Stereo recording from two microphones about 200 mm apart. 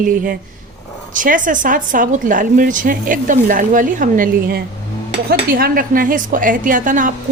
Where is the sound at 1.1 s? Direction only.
40° right (ahead or behind).